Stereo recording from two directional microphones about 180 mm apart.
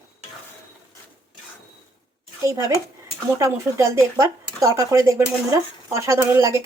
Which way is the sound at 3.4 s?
15° right (ahead or behind).